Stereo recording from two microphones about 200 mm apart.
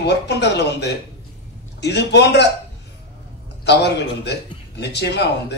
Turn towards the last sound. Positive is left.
turn(degrees=60)  # may be behind; listen again after turning